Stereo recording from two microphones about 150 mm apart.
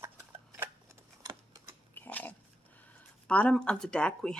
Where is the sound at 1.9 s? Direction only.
10° left (ahead or behind).